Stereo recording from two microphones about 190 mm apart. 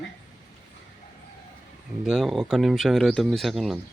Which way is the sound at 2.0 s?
Centre (ahead or behind).